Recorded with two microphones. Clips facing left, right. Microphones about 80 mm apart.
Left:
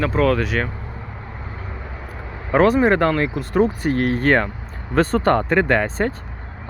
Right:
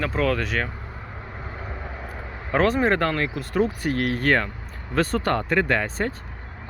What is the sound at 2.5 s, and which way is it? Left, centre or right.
Speech, centre.